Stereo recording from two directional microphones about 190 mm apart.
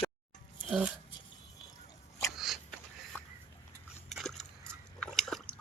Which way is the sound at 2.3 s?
Centre (ahead or behind).